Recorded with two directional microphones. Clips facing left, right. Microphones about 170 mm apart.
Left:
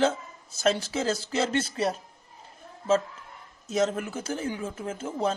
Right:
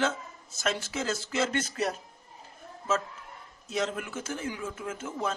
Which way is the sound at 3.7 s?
40° left (ahead or behind).